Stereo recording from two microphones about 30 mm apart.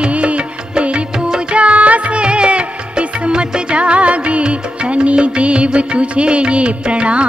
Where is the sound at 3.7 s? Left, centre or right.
Right.